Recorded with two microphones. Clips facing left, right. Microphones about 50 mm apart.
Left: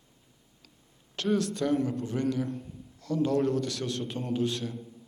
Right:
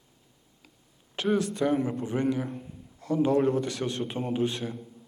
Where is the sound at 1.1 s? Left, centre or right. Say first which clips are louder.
Right 1 dB; centre.